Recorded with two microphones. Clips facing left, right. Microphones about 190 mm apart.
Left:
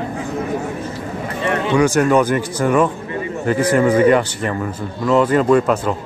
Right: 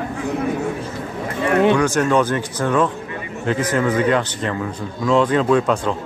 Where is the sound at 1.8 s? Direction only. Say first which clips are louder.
Left 3 dB; 10° left (ahead or behind).